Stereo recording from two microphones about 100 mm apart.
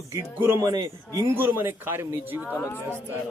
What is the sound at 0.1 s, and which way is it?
Speech, 25° right (ahead or behind).